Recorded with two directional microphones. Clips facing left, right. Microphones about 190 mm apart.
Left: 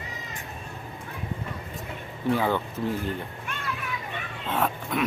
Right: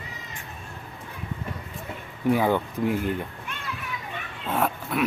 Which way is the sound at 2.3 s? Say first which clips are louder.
Right 3 dB; 15° right (ahead or behind).